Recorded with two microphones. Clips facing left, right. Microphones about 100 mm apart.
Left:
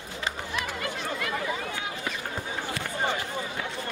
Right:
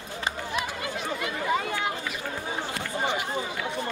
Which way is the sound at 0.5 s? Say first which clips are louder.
Right 1 dB; 20° right (ahead or behind).